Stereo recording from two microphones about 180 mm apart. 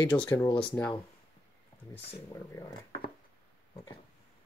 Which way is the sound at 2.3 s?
20° left (ahead or behind).